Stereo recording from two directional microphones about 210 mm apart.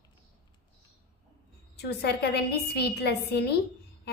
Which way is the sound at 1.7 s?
50° left (ahead or behind).